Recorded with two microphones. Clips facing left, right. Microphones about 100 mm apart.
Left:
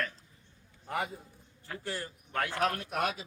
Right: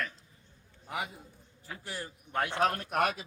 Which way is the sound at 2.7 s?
45° right (ahead or behind).